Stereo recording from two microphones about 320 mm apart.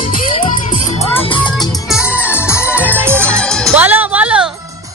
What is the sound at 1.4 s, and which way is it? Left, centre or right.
Music, centre.